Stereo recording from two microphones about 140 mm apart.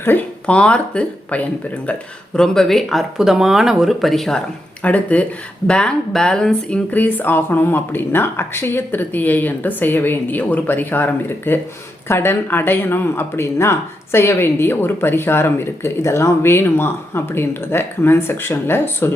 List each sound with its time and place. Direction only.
0.0 s speech: 15° left (ahead or behind)